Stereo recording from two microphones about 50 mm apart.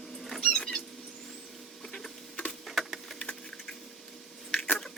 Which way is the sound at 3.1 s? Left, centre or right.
Left.